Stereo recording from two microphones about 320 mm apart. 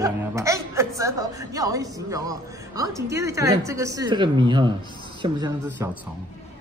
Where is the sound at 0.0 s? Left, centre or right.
Centre.